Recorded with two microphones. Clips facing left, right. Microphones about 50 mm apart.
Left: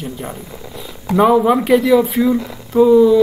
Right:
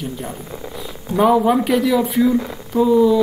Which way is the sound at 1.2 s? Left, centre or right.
Centre.